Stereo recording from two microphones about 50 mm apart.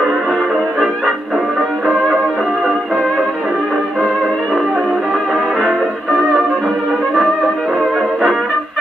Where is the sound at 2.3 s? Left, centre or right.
Right.